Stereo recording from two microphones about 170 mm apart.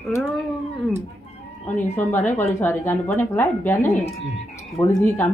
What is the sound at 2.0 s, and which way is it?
A woman's voice, 10° left (ahead or behind).